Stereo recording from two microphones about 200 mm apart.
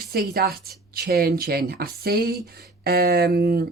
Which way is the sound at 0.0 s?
50° right (ahead or behind).